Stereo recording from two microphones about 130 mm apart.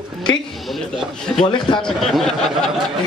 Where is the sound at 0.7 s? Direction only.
Centre (ahead or behind).